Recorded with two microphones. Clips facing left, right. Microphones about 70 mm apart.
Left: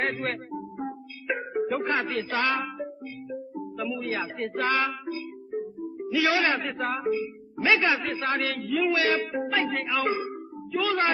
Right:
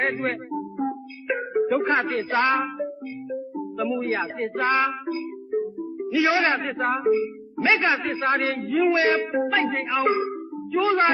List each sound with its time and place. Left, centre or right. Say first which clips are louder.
0.0 s speech: right 4 dB; right
0.5 s music: right 6 dB; centre
1.8 s a man's voice: right 4 dB; right
2.7 s music: right 5 dB; centre
3.9 s a man's voice: right 5 dB; right
5.5 s music: right 6 dB; centre
6.1 s a man's voice: right 3 dB; right
9.3 s speech: right 5 dB; centre
9.6 s speech: right 3 dB; right